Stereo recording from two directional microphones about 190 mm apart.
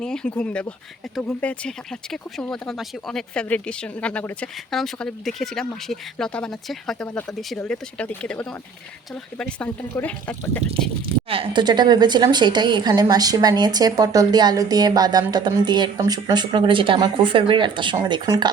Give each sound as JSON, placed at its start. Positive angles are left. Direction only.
{"t": 0.0, "sound": "speech", "side_deg": 5}
{"t": 11.0, "sound": "speech", "side_deg": -30}